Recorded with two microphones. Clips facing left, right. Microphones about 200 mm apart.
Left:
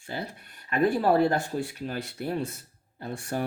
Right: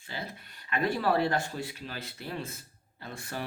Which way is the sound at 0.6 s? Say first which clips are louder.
Left 5 dB; 45° left (ahead or behind).